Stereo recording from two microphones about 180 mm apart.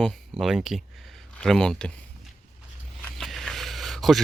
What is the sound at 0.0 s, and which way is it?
Speech, centre (ahead or behind).